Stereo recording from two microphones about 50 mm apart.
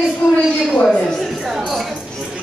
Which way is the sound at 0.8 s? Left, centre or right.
Centre.